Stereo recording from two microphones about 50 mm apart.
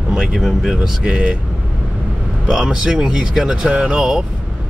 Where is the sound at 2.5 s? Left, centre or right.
Centre.